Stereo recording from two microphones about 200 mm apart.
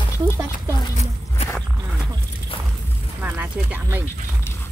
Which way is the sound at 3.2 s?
10° right (ahead or behind).